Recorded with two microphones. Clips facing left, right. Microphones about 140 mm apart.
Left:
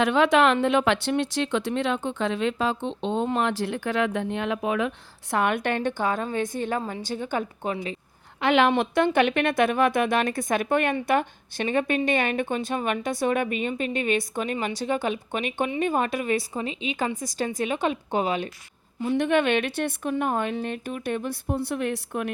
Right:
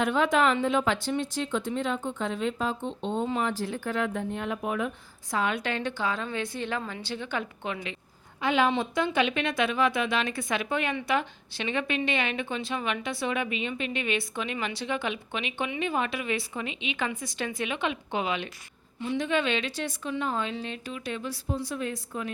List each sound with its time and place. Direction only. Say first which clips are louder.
0.0 s speech: left 4 dB; 80° left
5.3 s a woman's voice: left 5 dB; 60° left (ahead or behind); by 7.8 s 40° left (ahead or behind)
8.4 s a woman's voice: left 5 dB; 70° left (ahead or behind); by 18.5 s 40° left (ahead or behind)
19.0 s a woman's voice: left 5 dB; 60° left (ahead or behind)